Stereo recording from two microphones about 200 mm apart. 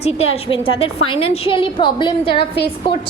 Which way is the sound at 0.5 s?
30° left (ahead or behind).